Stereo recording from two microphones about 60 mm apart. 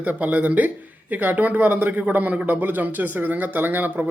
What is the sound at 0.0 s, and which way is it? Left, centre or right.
Speech, right.